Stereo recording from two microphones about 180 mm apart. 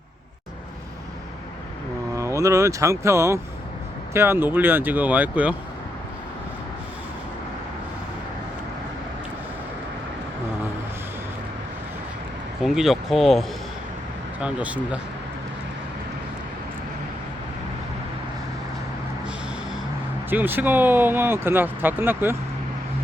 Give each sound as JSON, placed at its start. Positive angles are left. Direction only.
{"t": 2.1, "sound": "speech", "side_deg": -15}
{"t": 12.6, "sound": "speech", "side_deg": 0}
{"t": 14.4, "sound": "speech", "side_deg": -5}
{"t": 20.3, "sound": "speech", "side_deg": -10}